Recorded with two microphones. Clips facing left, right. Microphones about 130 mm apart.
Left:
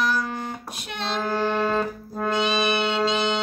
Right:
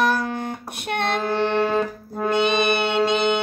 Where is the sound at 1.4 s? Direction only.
65° right (ahead or behind).